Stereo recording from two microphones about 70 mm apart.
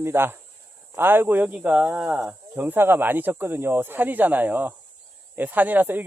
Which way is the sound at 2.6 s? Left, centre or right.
Right.